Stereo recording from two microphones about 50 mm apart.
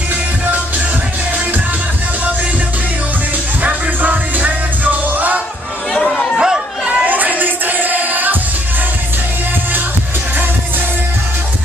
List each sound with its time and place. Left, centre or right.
3.6 s music: right
6.3 s chatter: centre
7.1 s music: right